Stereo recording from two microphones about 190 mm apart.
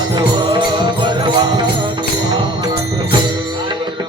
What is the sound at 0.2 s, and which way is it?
Music, 25° right (ahead or behind).